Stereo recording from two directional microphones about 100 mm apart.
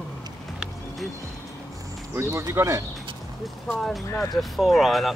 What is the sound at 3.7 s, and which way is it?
Speech, centre (ahead or behind).